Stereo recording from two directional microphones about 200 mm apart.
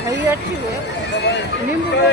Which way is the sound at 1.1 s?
60° left (ahead or behind).